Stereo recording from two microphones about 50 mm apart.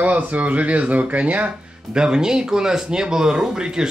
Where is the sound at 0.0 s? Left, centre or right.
Right.